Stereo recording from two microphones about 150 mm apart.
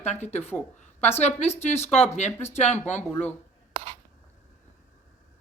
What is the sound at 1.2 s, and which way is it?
Speech, 45° left (ahead or behind).